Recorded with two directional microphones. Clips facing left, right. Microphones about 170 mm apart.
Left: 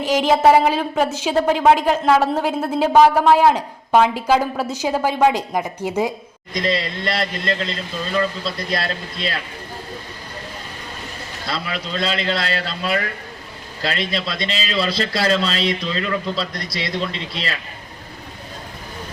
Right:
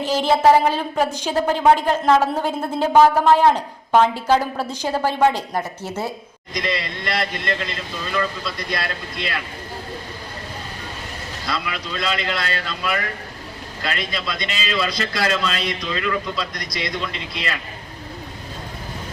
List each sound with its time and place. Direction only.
0.3 s a woman's voice: 5° left (ahead or behind)
6.5 s a man's voice: 30° left (ahead or behind)
11.4 s a man's voice: 30° left (ahead or behind)